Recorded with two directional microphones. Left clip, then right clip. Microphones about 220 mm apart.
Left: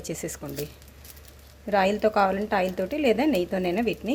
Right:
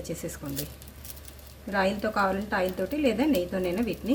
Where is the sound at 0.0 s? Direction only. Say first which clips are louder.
Left 2 dB; 45° left (ahead or behind).